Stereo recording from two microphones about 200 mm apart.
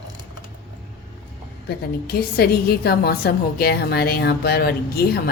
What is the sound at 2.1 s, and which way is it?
A woman's voice, 50° left (ahead or behind).